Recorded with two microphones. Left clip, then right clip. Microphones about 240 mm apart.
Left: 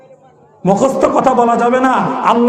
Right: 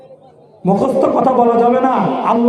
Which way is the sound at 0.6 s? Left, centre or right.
Left.